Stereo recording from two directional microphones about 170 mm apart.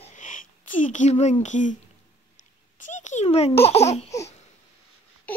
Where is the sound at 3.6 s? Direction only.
40° left (ahead or behind).